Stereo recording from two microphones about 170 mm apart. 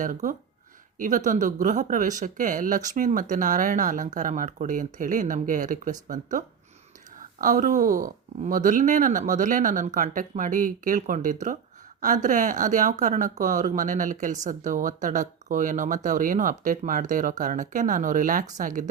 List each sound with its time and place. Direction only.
0.0 s speech: 50° right (ahead or behind)
7.4 s speech: 50° right (ahead or behind)